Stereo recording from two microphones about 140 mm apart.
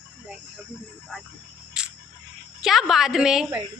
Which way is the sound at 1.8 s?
5° right (ahead or behind).